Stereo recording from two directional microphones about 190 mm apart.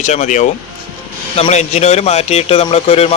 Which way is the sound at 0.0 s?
40° left (ahead or behind).